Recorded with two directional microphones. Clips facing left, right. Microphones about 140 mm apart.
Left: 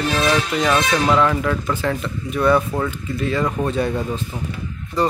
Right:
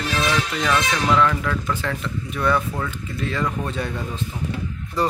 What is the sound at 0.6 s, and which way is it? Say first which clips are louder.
Speech: left 3 dB; 25° left (ahead or behind).